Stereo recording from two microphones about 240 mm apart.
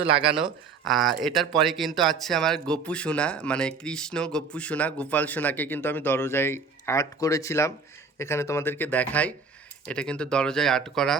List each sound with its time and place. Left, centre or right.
0.0 s speech: right
0.9 s speech: centre